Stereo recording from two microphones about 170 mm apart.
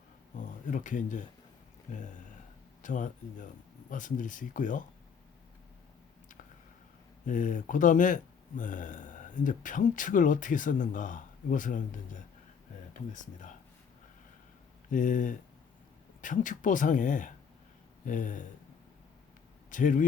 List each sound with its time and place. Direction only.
0.3 s speech: 50° left (ahead or behind)
7.3 s speech: 50° left (ahead or behind)
14.8 s speech: 50° left (ahead or behind)
19.7 s speech: 50° left (ahead or behind)